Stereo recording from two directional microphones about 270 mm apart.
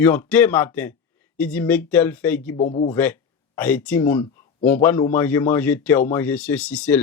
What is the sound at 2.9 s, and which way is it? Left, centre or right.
Speech, centre.